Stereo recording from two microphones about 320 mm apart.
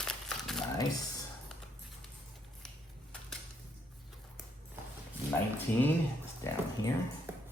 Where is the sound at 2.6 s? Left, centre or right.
Centre.